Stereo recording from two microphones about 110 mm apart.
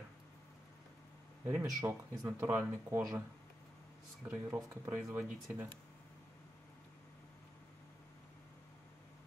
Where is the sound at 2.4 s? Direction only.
20° right (ahead or behind).